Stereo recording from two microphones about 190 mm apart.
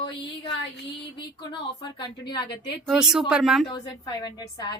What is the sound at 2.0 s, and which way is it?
Speech, 25° left (ahead or behind).